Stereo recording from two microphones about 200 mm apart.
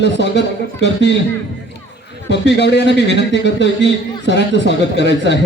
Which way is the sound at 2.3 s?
60° left (ahead or behind).